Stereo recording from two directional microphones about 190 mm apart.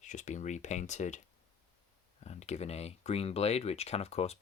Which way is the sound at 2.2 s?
35° left (ahead or behind).